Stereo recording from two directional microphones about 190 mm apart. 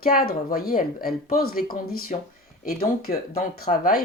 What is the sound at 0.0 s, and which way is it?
Speech, 50° left (ahead or behind).